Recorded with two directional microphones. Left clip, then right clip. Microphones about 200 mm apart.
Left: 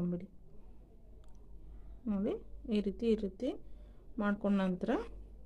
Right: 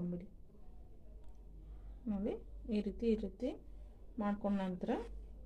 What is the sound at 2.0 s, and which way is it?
Speech, 40° left (ahead or behind).